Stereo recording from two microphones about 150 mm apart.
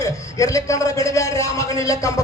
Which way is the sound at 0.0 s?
20° left (ahead or behind).